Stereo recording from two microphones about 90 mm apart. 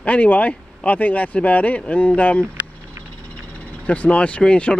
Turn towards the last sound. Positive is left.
turn(degrees=15)  # may be behind; listen again after turning